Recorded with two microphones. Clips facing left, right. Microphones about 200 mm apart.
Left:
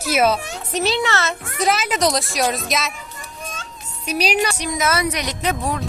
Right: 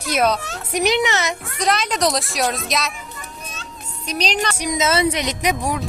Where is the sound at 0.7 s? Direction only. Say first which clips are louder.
Right 2 dB; 15° right (ahead or behind).